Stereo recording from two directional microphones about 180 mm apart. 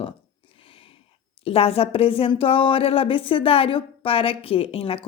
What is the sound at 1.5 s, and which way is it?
Speech, 30° left (ahead or behind).